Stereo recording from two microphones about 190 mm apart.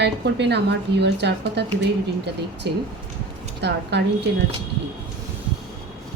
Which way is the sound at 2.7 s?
65° right (ahead or behind).